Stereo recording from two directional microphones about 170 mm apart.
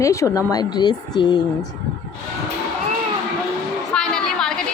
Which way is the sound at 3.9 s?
5° left (ahead or behind).